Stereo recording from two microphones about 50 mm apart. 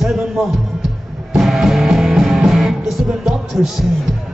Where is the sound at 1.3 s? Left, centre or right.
Centre.